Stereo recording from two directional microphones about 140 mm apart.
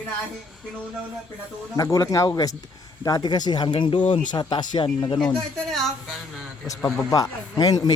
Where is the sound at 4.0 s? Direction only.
60° left (ahead or behind).